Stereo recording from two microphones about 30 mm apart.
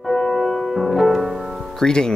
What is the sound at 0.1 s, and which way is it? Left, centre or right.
Music, centre.